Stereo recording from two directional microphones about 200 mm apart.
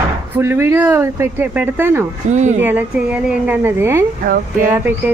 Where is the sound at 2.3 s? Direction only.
35° right (ahead or behind).